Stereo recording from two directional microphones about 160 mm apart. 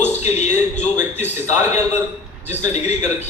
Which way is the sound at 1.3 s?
15° right (ahead or behind).